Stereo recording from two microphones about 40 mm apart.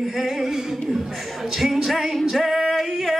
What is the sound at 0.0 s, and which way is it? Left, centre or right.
Music, centre.